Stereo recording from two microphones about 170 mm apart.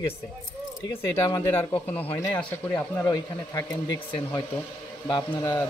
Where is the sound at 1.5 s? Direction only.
10° left (ahead or behind).